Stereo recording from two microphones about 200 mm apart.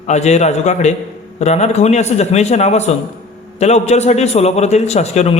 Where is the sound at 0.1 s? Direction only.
35° left (ahead or behind).